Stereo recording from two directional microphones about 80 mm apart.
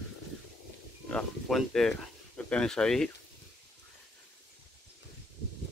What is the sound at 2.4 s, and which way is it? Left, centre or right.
Speech, centre.